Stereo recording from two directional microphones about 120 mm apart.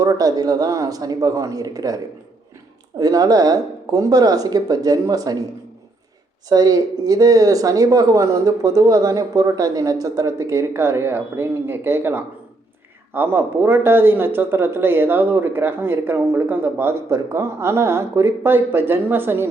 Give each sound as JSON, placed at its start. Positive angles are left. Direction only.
{"t": 0.0, "sound": "speech", "side_deg": -30}
{"t": 3.0, "sound": "speech", "side_deg": -30}
{"t": 6.5, "sound": "speech", "side_deg": -30}